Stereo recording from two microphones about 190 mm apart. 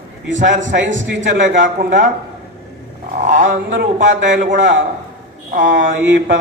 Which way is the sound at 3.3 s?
45° right (ahead or behind).